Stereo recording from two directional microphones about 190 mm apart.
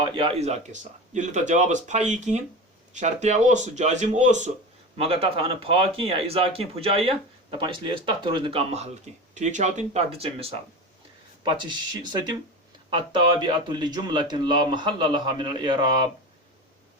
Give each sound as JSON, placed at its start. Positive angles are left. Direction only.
{"t": 0.0, "sound": "speech", "side_deg": -25}